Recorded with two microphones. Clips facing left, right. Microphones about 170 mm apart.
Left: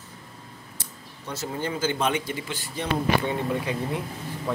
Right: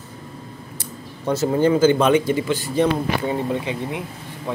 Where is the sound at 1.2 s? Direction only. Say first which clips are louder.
Right 13 dB; 90° right.